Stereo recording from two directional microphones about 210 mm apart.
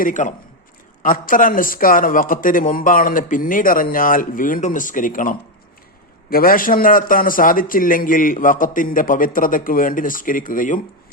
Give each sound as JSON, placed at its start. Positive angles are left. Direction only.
{"t": 0.0, "sound": "speech", "side_deg": 35}